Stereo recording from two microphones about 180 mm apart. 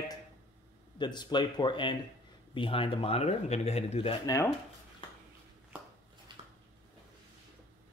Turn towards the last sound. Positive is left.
turn(degrees=-25)  # may be behind; listen again after turning